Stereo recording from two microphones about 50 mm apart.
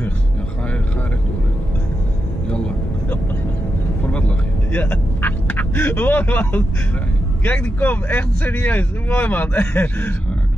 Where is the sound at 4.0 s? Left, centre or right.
Left.